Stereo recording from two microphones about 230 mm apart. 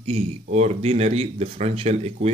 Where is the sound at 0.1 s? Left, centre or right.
Right.